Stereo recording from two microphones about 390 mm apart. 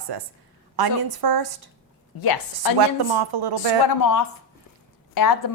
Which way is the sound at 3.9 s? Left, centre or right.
Left.